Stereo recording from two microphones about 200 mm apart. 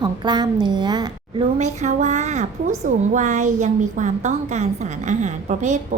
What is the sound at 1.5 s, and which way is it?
A woman's voice, 35° right (ahead or behind).